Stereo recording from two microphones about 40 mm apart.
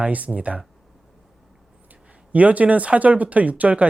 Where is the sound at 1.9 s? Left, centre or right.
Right.